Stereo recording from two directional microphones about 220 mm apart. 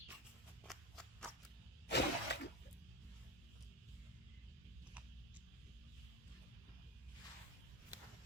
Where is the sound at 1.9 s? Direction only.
50° left (ahead or behind).